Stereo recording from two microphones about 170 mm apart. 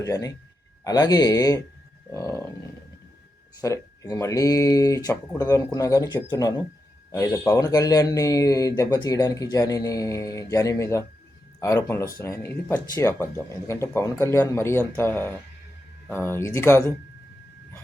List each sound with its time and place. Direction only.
0.0 s speech: 20° left (ahead or behind)
3.6 s speech: 20° left (ahead or behind)